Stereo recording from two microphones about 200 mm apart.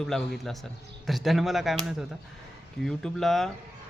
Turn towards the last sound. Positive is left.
turn(degrees=0)  # may be behind; listen again after turning